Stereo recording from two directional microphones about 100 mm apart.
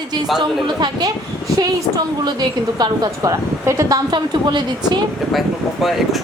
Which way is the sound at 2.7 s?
45° right (ahead or behind).